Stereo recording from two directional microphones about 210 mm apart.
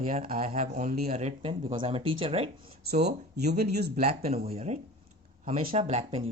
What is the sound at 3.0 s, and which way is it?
Speech, 50° right (ahead or behind).